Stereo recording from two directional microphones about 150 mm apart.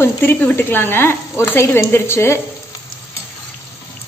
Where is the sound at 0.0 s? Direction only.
15° left (ahead or behind).